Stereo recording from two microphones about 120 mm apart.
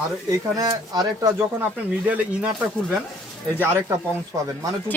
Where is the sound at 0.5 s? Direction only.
35° right (ahead or behind).